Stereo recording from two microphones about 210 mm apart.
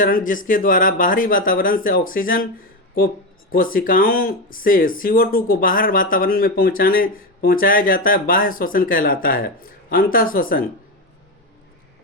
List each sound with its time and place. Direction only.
0.0 s speech: 40° left (ahead or behind)
3.5 s speech: 40° left (ahead or behind)